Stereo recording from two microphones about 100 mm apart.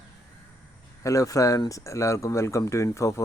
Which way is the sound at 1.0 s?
35° left (ahead or behind).